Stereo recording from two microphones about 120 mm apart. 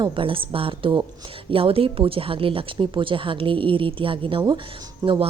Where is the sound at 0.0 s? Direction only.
45° right (ahead or behind).